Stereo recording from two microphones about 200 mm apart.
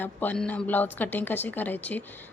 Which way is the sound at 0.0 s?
10° left (ahead or behind).